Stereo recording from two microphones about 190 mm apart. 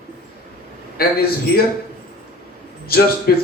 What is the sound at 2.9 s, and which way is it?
Speech, 55° left (ahead or behind).